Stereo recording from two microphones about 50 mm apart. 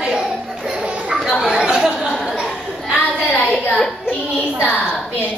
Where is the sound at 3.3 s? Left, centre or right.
Left.